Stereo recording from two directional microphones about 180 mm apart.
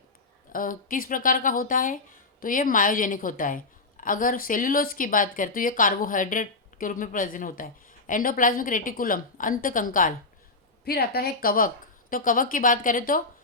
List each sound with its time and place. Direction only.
0.5 s a woman's voice: 50° left (ahead or behind)
10.8 s a woman's voice: 60° left (ahead or behind)